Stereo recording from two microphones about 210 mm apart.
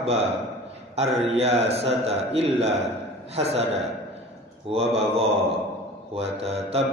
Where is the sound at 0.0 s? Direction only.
30° right (ahead or behind).